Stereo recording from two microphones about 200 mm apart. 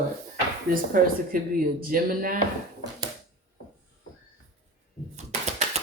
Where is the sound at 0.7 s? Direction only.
45° right (ahead or behind).